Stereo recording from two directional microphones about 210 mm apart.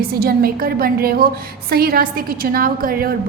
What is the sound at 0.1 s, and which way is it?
A woman's voice, 45° right (ahead or behind).